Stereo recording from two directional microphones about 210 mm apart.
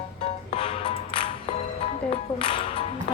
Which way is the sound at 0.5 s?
25° left (ahead or behind).